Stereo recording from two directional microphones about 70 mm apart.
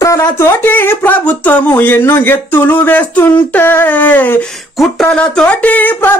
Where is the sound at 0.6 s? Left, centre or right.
Left.